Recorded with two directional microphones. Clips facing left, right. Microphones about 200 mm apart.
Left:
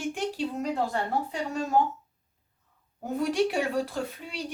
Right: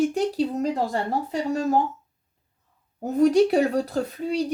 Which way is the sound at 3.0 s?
40° right (ahead or behind).